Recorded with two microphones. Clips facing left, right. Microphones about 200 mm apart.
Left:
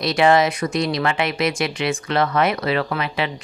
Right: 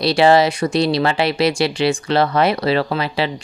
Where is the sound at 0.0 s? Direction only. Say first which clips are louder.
Right 3 dB; 30° right (ahead or behind).